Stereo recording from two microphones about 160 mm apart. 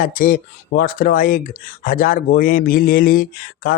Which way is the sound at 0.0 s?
60° left (ahead or behind).